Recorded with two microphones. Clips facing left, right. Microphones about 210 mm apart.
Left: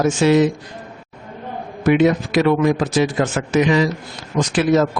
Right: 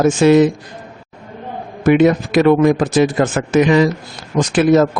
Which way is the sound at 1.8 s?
50° right (ahead or behind).